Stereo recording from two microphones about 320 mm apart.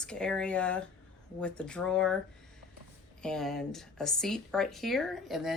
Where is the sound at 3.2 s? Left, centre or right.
Centre.